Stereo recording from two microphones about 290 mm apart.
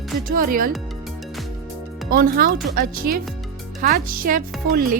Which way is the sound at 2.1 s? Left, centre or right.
Right.